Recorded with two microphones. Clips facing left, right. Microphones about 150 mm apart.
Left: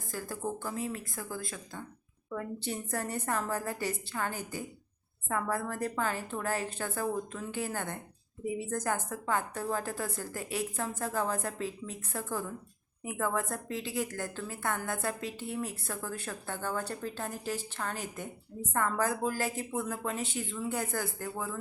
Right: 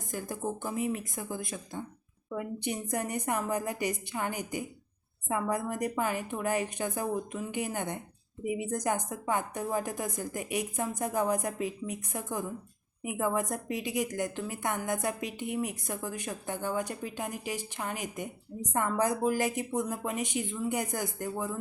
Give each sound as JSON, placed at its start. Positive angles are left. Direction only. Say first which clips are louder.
{"t": 0.1, "sound": "a woman's voice", "louder": "right 2 dB", "side_deg": -20}